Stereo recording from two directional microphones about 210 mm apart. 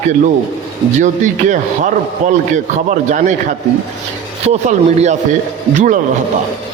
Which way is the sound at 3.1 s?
35° right (ahead or behind).